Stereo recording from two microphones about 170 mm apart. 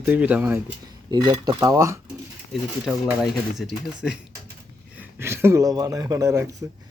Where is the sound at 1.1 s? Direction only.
25° right (ahead or behind).